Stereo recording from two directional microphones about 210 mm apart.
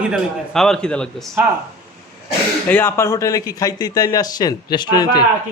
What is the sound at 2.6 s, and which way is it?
Speech, 10° left (ahead or behind).